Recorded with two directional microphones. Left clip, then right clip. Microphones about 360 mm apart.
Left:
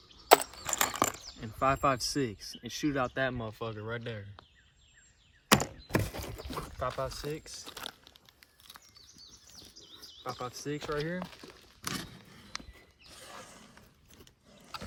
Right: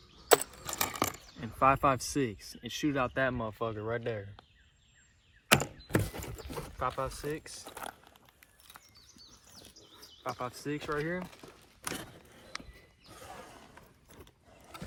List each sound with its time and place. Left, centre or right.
0.2 s speech: centre
5.5 s a sound: centre
6.7 s speech: centre
7.7 s a sound: centre
10.2 s speech: centre
13.1 s wild animals: centre